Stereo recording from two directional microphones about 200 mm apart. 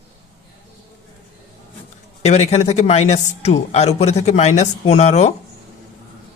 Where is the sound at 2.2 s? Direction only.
35° left (ahead or behind).